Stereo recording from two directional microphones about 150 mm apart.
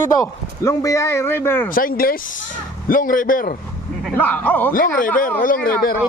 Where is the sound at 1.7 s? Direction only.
75° left (ahead or behind).